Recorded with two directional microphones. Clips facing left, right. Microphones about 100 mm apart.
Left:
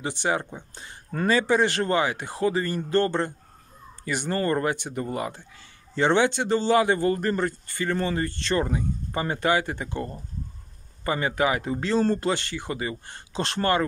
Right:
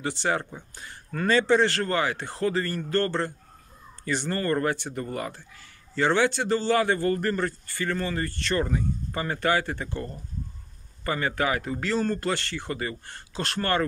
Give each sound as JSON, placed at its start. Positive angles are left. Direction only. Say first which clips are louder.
{"t": 0.0, "sound": "speech", "louder": "left 1 dB", "side_deg": 20}